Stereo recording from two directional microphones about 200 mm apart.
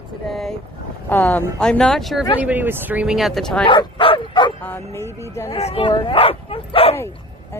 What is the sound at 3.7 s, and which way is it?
Speech, 25° left (ahead or behind).